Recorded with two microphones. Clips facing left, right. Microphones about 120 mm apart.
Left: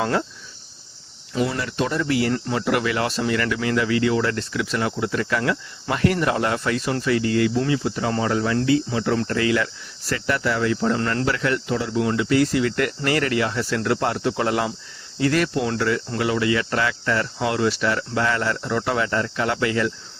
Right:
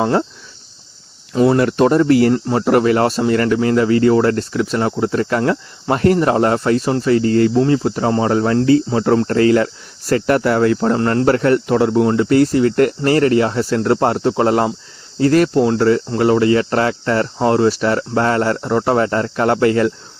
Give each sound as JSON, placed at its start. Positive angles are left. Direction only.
{"t": 0.0, "sound": "speech", "side_deg": -30}
{"t": 1.3, "sound": "speech", "side_deg": -50}
{"t": 10.9, "sound": "speech", "side_deg": -35}
{"t": 12.0, "sound": "speech", "side_deg": -40}